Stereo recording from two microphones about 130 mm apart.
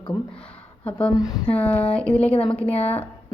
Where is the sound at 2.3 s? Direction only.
45° left (ahead or behind).